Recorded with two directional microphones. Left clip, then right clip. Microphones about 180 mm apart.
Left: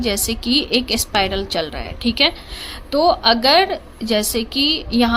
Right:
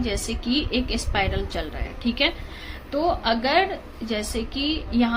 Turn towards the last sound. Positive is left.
turn(degrees=55)  # may be behind; listen again after turning